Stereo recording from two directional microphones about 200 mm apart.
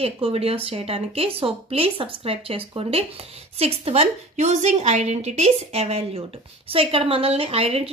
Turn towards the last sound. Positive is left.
turn(degrees=-30)  # may be behind; listen again after turning